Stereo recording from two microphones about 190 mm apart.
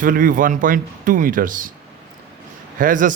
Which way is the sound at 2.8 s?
45° right (ahead or behind).